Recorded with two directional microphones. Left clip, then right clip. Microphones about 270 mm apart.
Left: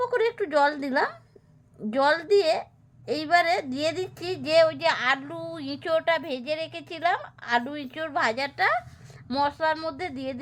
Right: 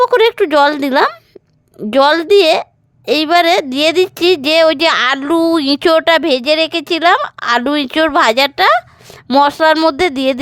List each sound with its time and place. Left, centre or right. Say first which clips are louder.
0.0 s speech: right 15 dB; right